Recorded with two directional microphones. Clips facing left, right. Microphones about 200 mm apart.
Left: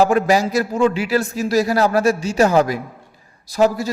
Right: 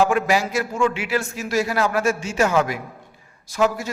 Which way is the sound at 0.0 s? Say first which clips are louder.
Left 4 dB; 40° left (ahead or behind).